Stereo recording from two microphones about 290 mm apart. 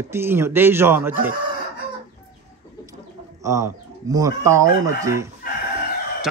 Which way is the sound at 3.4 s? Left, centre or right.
Centre.